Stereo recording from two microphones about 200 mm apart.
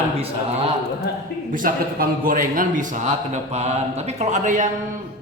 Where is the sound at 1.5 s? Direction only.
45° right (ahead or behind).